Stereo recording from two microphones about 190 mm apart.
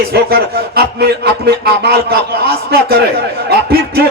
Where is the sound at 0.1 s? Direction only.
55° right (ahead or behind).